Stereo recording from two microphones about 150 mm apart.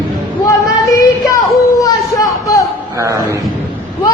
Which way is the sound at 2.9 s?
20° right (ahead or behind).